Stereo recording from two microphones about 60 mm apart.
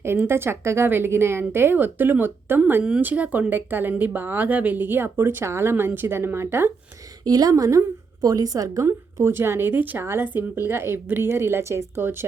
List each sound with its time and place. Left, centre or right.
0.0 s speech: right
7.3 s a woman's voice: right
8.2 s a woman's voice: right
9.1 s speech: right
10.0 s speech: right